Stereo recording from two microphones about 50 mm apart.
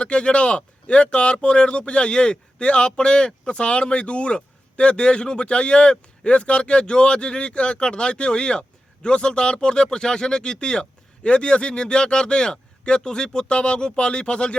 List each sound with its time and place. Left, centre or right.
0.0 s speech: centre